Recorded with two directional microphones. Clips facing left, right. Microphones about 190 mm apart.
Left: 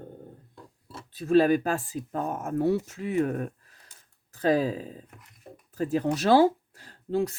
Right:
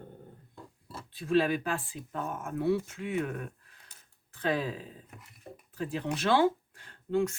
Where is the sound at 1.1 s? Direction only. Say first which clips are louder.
Left 6 dB; 45° left (ahead or behind).